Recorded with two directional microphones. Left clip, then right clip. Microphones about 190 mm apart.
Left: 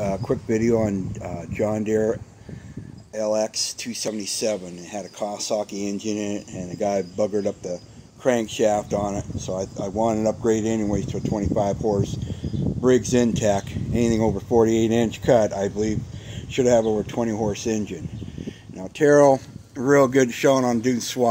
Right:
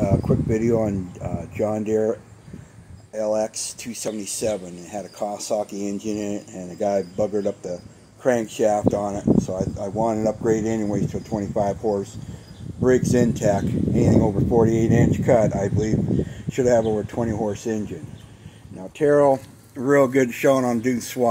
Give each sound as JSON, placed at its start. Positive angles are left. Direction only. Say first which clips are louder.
{"t": 0.0, "sound": "speech", "louder": "right 2 dB", "side_deg": 0}
{"t": 3.2, "sound": "speech", "louder": "even", "side_deg": 0}
{"t": 19.9, "sound": "speech", "louder": "even", "side_deg": 5}